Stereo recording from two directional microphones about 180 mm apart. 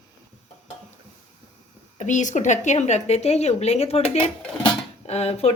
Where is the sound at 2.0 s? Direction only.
45° left (ahead or behind).